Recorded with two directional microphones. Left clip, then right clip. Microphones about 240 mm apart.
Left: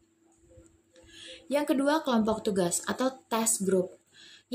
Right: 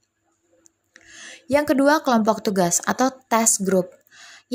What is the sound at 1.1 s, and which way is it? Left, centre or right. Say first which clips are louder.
Speech: right 9 dB; right.